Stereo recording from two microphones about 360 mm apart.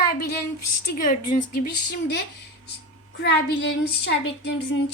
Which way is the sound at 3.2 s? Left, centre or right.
Left.